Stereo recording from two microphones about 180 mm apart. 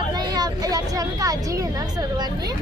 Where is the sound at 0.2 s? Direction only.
20° right (ahead or behind).